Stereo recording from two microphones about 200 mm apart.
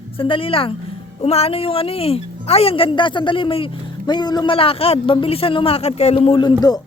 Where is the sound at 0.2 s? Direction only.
25° left (ahead or behind).